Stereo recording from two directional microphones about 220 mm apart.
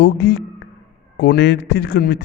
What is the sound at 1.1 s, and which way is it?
Speech, 45° left (ahead or behind).